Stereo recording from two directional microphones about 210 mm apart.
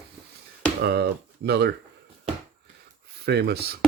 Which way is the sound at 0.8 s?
50° right (ahead or behind).